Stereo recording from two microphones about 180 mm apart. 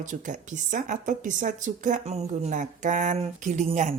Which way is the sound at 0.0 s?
45° right (ahead or behind).